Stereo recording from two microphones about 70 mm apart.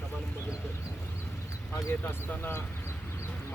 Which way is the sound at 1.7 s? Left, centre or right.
Left.